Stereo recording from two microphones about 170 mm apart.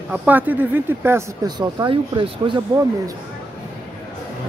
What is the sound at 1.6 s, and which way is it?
Speech, 30° right (ahead or behind).